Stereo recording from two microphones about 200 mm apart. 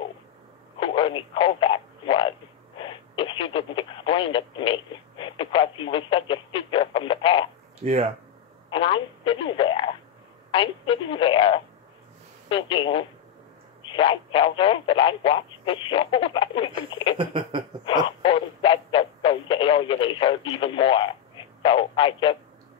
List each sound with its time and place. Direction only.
0.7 s telephone: 25° left (ahead or behind)
2.8 s speech: 25° left (ahead or behind)
7.8 s speech: 30° right (ahead or behind)
8.6 s speech: 25° left (ahead or behind)
17.2 s a sound: 25° right (ahead or behind)
18.0 s speech: 25° left (ahead or behind)